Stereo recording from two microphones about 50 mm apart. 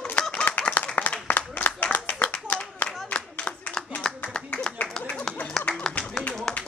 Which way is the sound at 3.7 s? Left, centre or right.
Centre.